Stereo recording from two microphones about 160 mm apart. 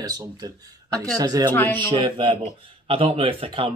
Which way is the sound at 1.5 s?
10° left (ahead or behind).